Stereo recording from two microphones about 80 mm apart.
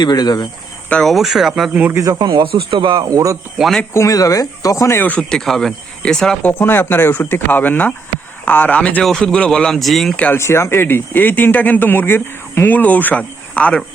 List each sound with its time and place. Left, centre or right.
0.0 s cricket: left
1.0 s speech: centre
1.7 s speech: centre
2.1 s speech: right
3.1 s speech: right
3.6 s speech: centre
3.9 s speech: left
4.9 s speech: centre
5.3 s speech: centre
6.4 s speech: left; by 10.2 s centre
10.3 s speech: left; by 13.8 s centre